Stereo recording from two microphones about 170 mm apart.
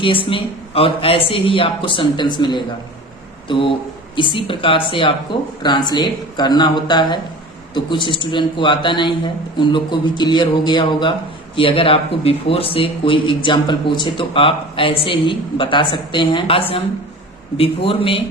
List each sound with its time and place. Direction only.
0.0 s speech: 30° left (ahead or behind)